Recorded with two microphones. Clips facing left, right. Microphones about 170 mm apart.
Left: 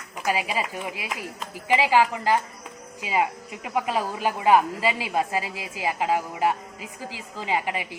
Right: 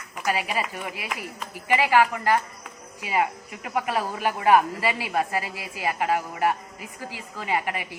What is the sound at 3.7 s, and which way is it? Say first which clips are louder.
A woman's voice: left 1 dB; 15° left (ahead or behind).